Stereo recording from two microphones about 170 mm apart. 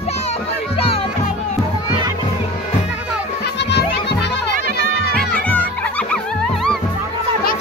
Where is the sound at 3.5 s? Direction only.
85° left.